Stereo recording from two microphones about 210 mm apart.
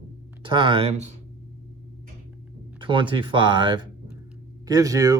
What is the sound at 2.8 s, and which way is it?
Speech, 25° right (ahead or behind).